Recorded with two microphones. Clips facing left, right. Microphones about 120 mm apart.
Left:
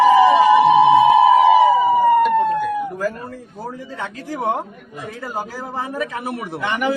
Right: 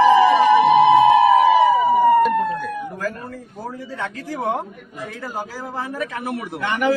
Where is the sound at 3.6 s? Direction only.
15° left (ahead or behind).